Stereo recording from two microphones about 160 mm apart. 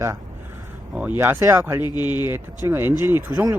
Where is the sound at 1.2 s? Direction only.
15° right (ahead or behind).